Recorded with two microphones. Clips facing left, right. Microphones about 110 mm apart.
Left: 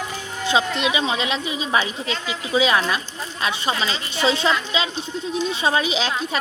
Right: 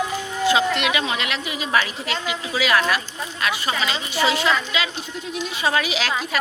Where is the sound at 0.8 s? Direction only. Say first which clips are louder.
Left 1 dB; 25° left (ahead or behind).